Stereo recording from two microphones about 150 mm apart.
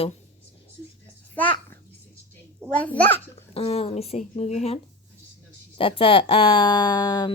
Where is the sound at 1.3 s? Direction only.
10° left (ahead or behind).